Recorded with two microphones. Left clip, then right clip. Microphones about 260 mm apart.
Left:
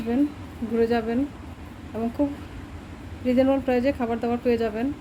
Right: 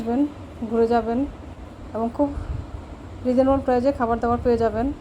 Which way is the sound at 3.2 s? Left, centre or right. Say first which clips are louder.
Right 2 dB; centre.